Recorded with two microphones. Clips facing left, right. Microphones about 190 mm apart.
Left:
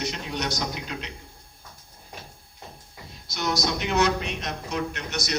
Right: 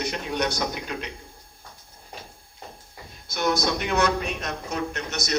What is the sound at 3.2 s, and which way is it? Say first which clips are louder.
Speech: right 3 dB; 55° right (ahead or behind).